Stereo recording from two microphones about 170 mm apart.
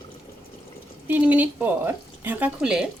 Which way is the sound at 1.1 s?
10° right (ahead or behind).